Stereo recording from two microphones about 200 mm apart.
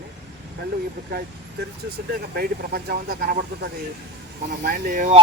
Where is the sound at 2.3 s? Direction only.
50° right (ahead or behind).